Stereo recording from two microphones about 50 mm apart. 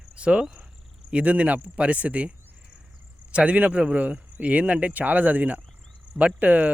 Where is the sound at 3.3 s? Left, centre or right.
Right.